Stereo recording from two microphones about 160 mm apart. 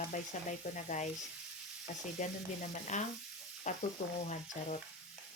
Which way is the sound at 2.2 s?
50° left (ahead or behind).